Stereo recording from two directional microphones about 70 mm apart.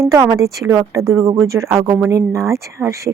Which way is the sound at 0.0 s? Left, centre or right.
Right.